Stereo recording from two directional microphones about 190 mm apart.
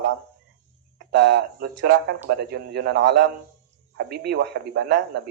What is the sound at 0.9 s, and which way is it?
Speech, 65° right (ahead or behind).